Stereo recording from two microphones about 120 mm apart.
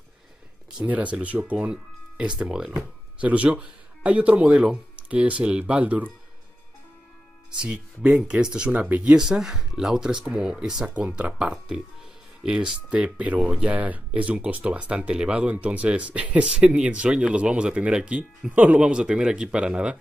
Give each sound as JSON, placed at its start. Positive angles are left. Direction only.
{"t": 0.7, "sound": "speech", "side_deg": -10}
{"t": 7.5, "sound": "speech", "side_deg": -10}